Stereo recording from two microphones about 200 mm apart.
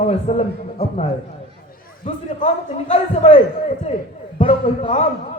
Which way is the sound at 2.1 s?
35° left (ahead or behind).